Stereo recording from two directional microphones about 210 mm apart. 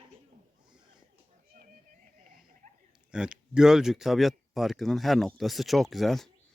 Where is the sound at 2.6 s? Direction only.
40° right (ahead or behind).